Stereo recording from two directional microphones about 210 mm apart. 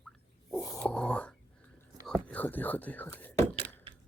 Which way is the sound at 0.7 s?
5° left (ahead or behind).